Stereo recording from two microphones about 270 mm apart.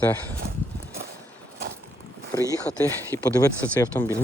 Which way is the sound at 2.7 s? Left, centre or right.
Centre.